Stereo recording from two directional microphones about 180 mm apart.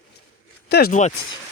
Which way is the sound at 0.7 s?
60° left (ahead or behind).